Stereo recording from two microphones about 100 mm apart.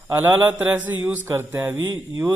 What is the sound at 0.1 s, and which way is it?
Mantra, 20° right (ahead or behind).